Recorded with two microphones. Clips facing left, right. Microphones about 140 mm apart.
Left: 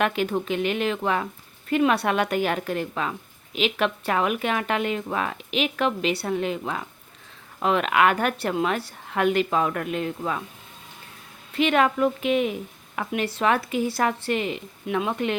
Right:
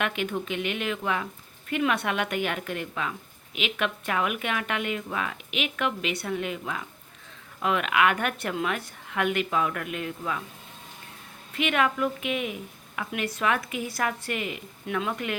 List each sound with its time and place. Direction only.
0.0 s a woman's voice: 35° left (ahead or behind)
11.5 s a woman's voice: 35° left (ahead or behind)